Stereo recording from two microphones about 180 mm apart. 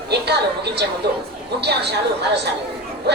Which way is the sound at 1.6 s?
65° right (ahead or behind).